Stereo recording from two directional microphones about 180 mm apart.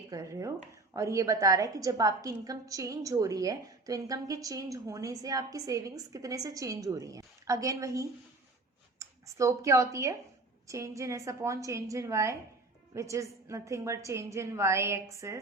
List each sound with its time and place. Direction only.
0.1 s a woman's voice: 20° right (ahead or behind)